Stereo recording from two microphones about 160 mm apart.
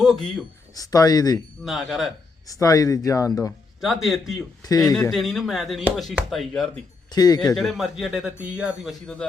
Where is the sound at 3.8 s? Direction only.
Centre (ahead or behind).